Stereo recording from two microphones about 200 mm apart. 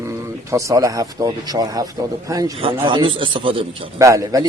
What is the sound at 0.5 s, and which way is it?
A man's voice, 15° right (ahead or behind).